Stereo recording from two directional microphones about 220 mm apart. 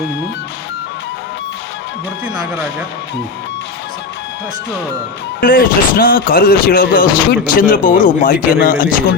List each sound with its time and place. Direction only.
5.4 s speech: 40° left (ahead or behind)